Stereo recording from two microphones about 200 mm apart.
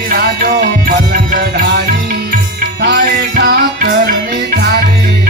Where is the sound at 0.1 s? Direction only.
50° right (ahead or behind).